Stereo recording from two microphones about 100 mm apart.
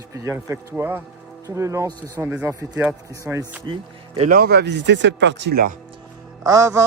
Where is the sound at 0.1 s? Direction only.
30° right (ahead or behind).